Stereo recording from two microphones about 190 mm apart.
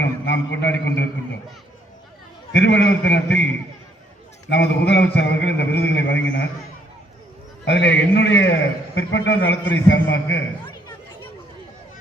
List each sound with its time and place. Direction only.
0.0 s a man's voice: 65° left (ahead or behind)
2.5 s a man's voice: 70° left (ahead or behind)
4.4 s a man's voice: 65° left (ahead or behind)
7.6 s a man's voice: 70° left (ahead or behind)
9.5 s a man's voice: 75° left (ahead or behind)